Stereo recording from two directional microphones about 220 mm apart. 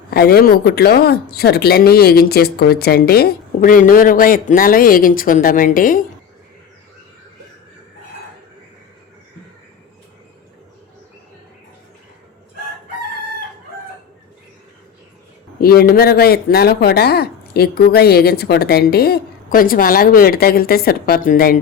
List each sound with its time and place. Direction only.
0.1 s speech: 45° left (ahead or behind)
15.6 s speech: 45° left (ahead or behind)